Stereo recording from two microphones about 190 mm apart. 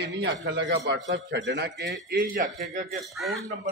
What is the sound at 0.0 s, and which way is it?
A man's voice, 65° right (ahead or behind).